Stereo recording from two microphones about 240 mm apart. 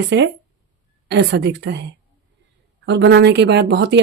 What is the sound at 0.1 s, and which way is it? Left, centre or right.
A woman's voice, right.